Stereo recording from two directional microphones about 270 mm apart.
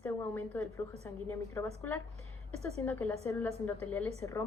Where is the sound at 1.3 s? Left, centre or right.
Centre.